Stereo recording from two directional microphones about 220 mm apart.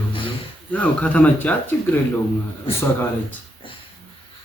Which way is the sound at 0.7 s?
5° left (ahead or behind).